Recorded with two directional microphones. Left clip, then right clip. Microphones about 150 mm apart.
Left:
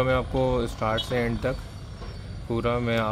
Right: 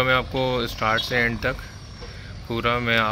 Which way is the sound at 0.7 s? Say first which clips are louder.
Right 4 dB; 5° left (ahead or behind).